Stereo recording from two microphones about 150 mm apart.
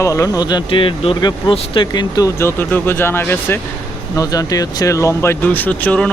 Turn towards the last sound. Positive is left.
turn(degrees=10)  # may be behind; listen again after turning